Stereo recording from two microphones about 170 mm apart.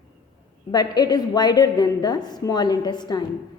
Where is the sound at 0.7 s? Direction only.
25° left (ahead or behind).